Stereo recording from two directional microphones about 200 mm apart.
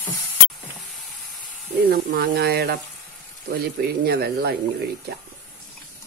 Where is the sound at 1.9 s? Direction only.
50° right (ahead or behind).